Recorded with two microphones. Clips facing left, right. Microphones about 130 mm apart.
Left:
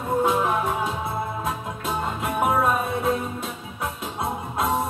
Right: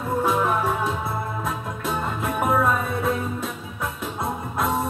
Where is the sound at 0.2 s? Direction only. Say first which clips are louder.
Right 1 dB; 20° left (ahead or behind).